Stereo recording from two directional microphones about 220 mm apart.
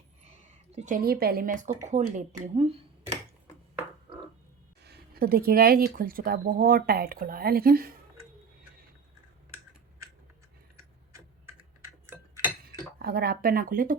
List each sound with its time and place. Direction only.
0.3 s speech: 30° right (ahead or behind)
4.8 s speech: 50° right (ahead or behind)
12.6 s a sound: 45° right (ahead or behind)